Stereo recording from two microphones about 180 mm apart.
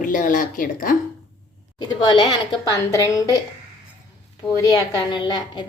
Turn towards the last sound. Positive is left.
turn(degrees=25)  # may be behind; listen again after turning